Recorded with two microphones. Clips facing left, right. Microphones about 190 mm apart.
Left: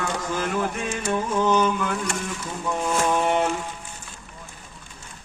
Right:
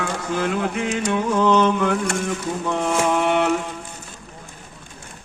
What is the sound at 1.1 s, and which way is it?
Music, 65° right (ahead or behind).